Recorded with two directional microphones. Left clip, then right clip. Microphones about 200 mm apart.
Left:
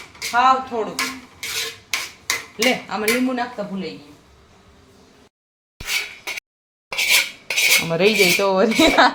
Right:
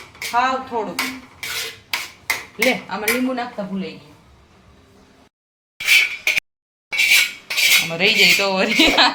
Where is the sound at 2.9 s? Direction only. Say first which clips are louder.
Left 1 dB; 15° left (ahead or behind).